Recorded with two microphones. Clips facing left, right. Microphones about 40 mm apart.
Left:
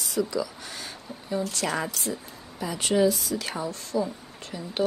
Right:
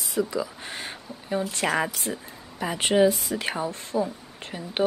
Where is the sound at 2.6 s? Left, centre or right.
Right.